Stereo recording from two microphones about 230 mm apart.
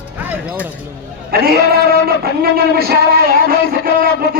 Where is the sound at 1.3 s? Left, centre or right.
Right.